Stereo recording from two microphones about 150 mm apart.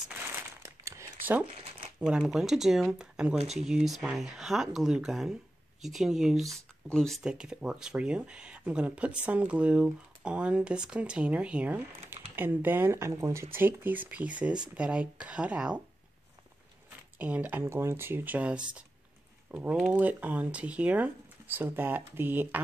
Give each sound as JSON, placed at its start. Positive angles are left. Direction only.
{"t": 0.4, "sound": "crumpling", "side_deg": -20}
{"t": 1.4, "sound": "crumpling", "side_deg": -35}
{"t": 2.0, "sound": "speech", "side_deg": -5}
{"t": 17.2, "sound": "speech", "side_deg": -10}